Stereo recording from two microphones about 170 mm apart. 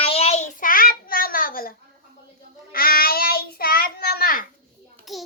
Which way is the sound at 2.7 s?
60° left (ahead or behind).